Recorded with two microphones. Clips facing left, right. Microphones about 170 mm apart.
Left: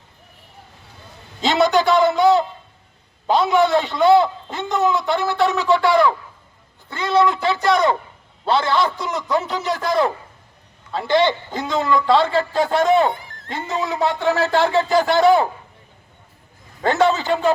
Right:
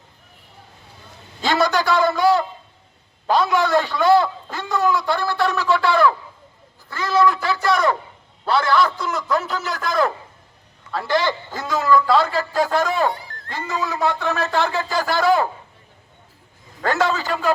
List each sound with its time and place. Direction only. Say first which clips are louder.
1.4 s a man's voice: left 3 dB; 20° left (ahead or behind)
16.8 s a man's voice: left 3 dB; 25° left (ahead or behind)